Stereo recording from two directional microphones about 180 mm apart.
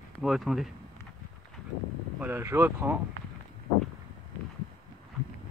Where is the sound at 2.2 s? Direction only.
10° right (ahead or behind).